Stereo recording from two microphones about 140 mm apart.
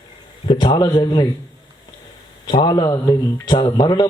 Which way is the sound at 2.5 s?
35° left (ahead or behind).